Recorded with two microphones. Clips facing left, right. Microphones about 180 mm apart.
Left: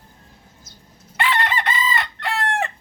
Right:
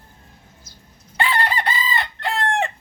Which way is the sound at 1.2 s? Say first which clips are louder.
Even; 35° right (ahead or behind).